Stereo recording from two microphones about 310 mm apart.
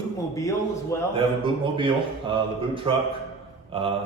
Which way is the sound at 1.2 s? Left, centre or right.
Centre.